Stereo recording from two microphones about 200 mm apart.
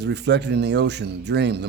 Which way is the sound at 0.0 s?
60° right (ahead or behind).